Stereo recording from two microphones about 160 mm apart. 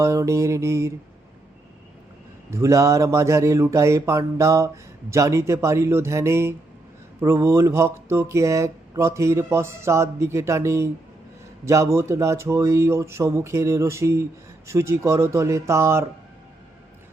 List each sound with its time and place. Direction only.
0.0 s speech: 20° right (ahead or behind)
2.5 s speech: 20° right (ahead or behind)